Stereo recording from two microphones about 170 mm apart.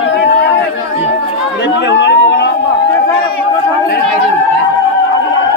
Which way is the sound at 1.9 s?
90° left.